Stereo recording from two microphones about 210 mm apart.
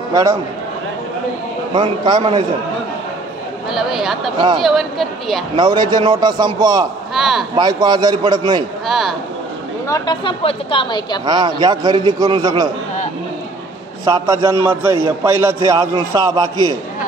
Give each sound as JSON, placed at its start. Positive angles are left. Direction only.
{"t": 0.1, "sound": "a man's voice", "side_deg": -15}
{"t": 1.7, "sound": "a man's voice", "side_deg": -20}
{"t": 3.7, "sound": "speech", "side_deg": 0}
{"t": 5.6, "sound": "a man's voice", "side_deg": -20}
{"t": 7.2, "sound": "speech", "side_deg": 0}
{"t": 7.5, "sound": "a man's voice", "side_deg": -20}
{"t": 8.8, "sound": "speech", "side_deg": 0}
{"t": 9.8, "sound": "speech", "side_deg": 20}
{"t": 11.2, "sound": "a man's voice", "side_deg": -20}
{"t": 14.0, "sound": "a man's voice", "side_deg": -15}